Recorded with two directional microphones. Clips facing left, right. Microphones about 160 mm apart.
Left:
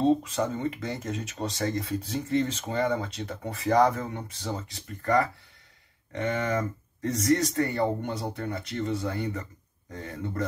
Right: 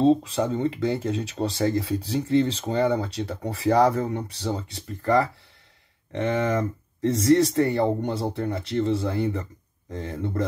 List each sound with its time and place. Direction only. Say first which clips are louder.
0.0 s speech: right 4 dB; 30° right (ahead or behind)